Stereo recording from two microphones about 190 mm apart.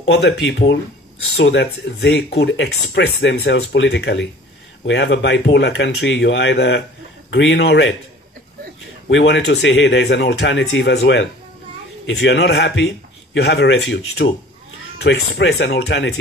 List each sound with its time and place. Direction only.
0.1 s speech: 65° left (ahead or behind)
9.1 s speech: 65° left (ahead or behind)